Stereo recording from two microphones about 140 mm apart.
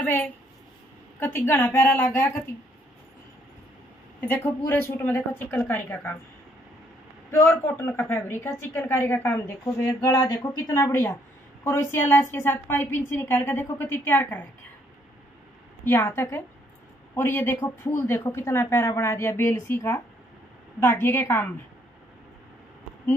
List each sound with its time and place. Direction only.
0.0 s a sound: 15° left (ahead or behind)
1.2 s a woman's voice: 15° left (ahead or behind)
4.3 s a woman's voice: 15° left (ahead or behind)
7.2 s a woman's voice: 15° left (ahead or behind)
15.8 s a woman's voice: 15° left (ahead or behind)